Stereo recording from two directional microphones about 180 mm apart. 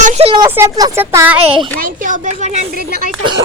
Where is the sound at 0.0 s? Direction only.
40° right (ahead or behind).